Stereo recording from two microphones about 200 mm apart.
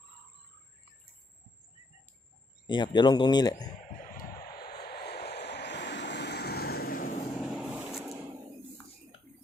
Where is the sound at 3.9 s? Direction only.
45° left (ahead or behind).